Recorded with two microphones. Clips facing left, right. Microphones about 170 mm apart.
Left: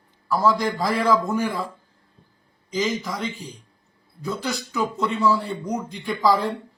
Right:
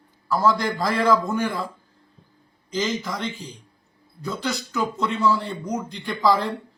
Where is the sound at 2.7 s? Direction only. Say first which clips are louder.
Left 1 dB; centre (ahead or behind).